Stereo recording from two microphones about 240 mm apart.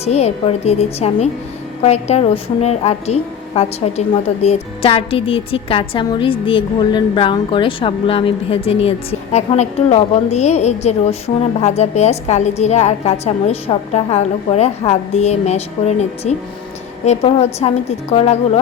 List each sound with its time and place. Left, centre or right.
0.0 s a woman's voice: left